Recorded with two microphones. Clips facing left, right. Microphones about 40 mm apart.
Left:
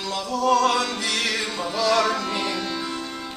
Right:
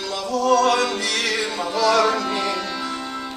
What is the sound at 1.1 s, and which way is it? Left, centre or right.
Music, centre.